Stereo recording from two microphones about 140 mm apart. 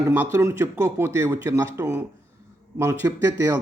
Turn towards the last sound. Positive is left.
turn(degrees=-15)  # may be behind; listen again after turning